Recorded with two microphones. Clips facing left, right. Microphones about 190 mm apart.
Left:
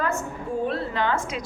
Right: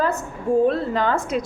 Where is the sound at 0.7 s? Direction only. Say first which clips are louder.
Right 5 dB; 45° right (ahead or behind).